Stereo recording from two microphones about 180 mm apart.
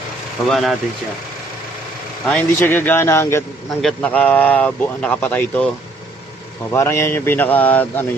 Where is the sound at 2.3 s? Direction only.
10° left (ahead or behind).